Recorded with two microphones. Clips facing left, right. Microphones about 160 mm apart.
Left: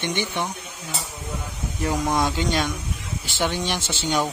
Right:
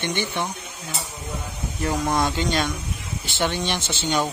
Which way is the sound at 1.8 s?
10° left (ahead or behind).